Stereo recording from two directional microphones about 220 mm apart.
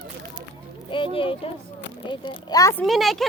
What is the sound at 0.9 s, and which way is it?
A child's voice, 25° left (ahead or behind).